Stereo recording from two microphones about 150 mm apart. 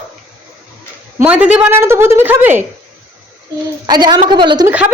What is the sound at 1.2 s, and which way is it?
A woman's voice, 10° right (ahead or behind).